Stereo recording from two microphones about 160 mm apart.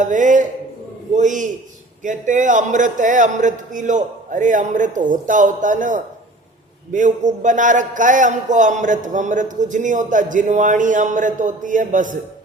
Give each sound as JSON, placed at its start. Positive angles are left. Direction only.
{"t": 0.0, "sound": "a man's voice", "side_deg": -50}